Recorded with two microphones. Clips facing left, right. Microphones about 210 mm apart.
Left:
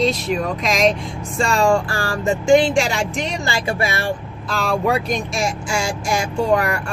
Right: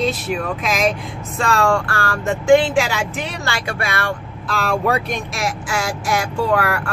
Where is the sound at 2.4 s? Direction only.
5° right (ahead or behind).